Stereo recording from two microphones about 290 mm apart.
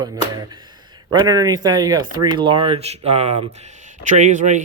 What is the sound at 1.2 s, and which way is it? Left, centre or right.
Speech, centre.